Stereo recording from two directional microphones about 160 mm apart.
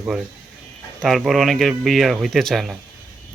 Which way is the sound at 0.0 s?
5° right (ahead or behind).